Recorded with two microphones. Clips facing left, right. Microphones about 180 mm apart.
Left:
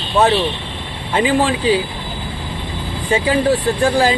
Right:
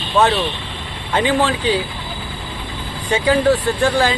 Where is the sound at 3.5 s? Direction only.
35° left (ahead or behind).